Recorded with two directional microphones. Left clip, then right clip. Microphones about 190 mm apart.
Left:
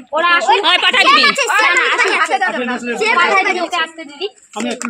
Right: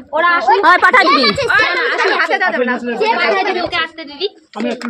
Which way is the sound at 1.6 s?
25° left (ahead or behind).